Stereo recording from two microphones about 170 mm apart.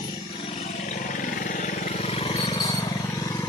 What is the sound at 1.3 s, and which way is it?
Vehicle, 50° left (ahead or behind).